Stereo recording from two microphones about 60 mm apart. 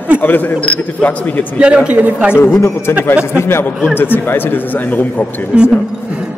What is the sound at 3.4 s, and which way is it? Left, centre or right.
Speech, left.